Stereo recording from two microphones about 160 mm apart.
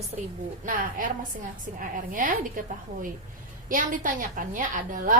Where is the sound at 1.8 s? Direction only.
55° right (ahead or behind).